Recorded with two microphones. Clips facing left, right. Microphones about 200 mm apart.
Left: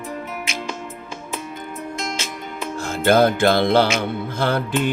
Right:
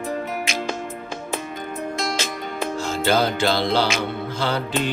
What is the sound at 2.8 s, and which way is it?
Music, 55° left (ahead or behind).